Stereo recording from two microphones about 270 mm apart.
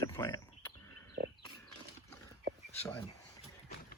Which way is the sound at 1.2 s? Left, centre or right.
Right.